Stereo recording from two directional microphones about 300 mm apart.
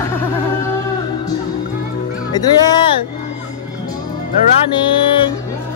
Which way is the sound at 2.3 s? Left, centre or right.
Centre.